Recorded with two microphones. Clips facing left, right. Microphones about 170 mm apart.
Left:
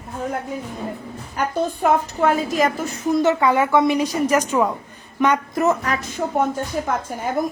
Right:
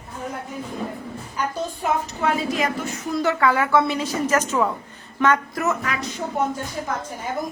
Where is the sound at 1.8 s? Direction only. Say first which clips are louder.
Left 4 dB; 45° left (ahead or behind).